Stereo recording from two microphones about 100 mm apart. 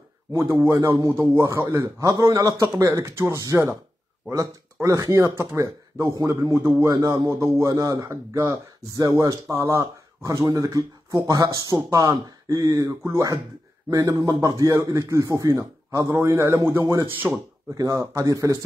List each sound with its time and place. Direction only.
0.3 s a man's voice: 25° right (ahead or behind)
4.8 s a man's voice: 30° right (ahead or behind)
6.9 s speech: 40° right (ahead or behind); by 17.4 s 20° right (ahead or behind)
17.7 s speech: 35° right (ahead or behind)